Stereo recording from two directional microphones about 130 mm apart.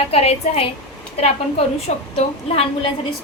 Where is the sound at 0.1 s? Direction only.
50° left (ahead or behind).